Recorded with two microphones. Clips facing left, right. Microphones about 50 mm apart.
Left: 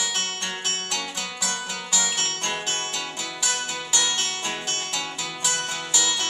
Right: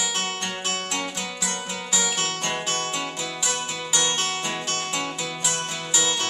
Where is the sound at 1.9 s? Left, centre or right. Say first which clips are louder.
Right 1 dB; centre.